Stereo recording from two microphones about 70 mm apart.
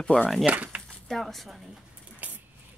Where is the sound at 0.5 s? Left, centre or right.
Right.